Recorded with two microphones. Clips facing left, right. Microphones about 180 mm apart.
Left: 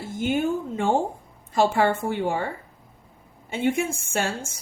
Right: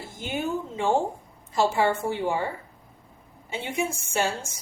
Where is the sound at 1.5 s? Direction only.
55° left (ahead or behind).